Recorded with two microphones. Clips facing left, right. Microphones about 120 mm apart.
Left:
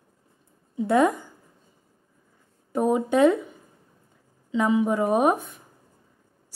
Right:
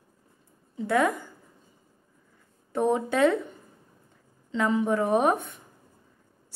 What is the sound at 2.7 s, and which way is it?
Speech, 15° left (ahead or behind).